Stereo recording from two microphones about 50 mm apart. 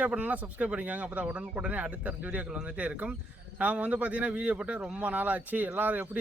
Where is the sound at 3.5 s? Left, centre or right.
Right.